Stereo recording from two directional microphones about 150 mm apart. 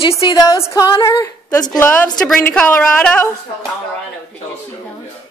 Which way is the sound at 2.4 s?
10° left (ahead or behind).